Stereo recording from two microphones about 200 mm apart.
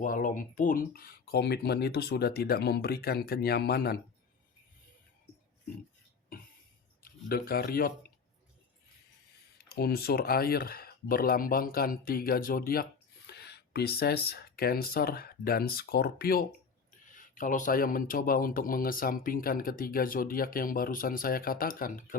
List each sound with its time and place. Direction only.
0.0 s a man's voice: 40° left (ahead or behind)
7.0 s speech: 50° left (ahead or behind)
9.6 s a man's voice: 50° left (ahead or behind)